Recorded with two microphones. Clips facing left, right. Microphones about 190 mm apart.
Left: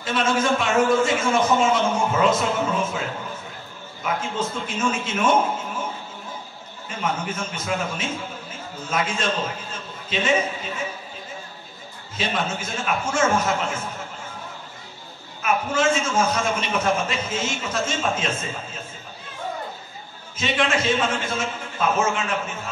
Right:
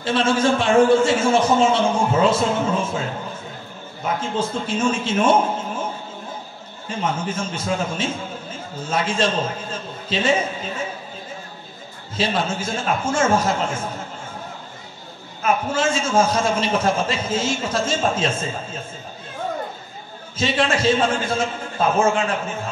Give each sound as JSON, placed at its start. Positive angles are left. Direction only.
{"t": 0.0, "sound": "a man's voice", "side_deg": -30}
{"t": 4.0, "sound": "a man's voice", "side_deg": -30}
{"t": 7.0, "sound": "a man's voice", "side_deg": -30}
{"t": 12.2, "sound": "a man's voice", "side_deg": -30}
{"t": 15.4, "sound": "a man's voice", "side_deg": -30}
{"t": 20.3, "sound": "a man's voice", "side_deg": -30}